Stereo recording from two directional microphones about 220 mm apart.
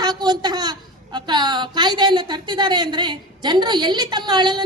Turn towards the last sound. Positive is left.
turn(degrees=-20)  # may be behind; listen again after turning